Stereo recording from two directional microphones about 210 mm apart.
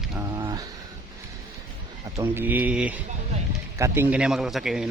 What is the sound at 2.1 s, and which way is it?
Speech, 10° right (ahead or behind).